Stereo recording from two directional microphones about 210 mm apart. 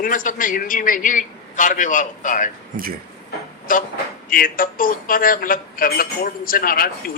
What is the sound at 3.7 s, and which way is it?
A man's voice, 40° left (ahead or behind).